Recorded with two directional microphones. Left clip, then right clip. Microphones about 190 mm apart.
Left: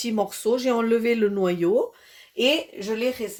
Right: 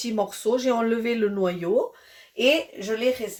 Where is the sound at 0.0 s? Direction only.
40° left (ahead or behind).